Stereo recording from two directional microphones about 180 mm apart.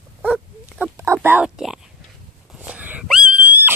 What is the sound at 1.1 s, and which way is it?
Whispering, 5° right (ahead or behind).